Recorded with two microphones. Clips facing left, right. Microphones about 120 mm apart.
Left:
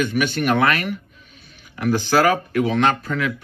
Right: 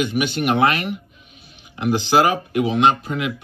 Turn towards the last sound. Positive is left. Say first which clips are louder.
# right 2 dB
turn(degrees=-20)  # may be behind; listen again after turning